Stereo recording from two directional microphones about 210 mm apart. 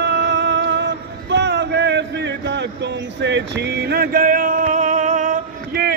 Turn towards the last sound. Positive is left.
turn(degrees=-45)  # may be behind; listen again after turning